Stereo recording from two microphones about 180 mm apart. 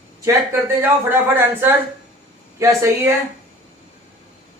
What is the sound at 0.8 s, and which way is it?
Speech, 10° right (ahead or behind).